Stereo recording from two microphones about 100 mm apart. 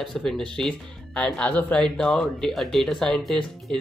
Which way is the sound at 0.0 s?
5° left (ahead or behind).